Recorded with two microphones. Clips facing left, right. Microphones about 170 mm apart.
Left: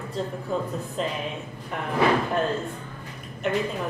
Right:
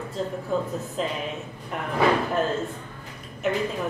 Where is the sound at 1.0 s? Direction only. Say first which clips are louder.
Even; centre (ahead or behind).